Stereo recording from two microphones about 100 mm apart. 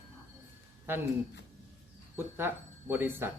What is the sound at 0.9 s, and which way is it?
Speech, 20° right (ahead or behind).